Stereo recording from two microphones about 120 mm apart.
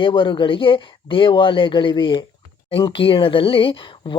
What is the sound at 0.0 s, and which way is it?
Speech, 45° left (ahead or behind).